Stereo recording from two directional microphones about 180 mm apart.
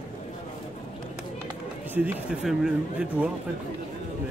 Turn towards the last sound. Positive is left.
turn(degrees=-5)  # may be behind; listen again after turning